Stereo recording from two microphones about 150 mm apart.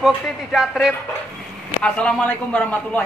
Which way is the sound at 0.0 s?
Centre (ahead or behind).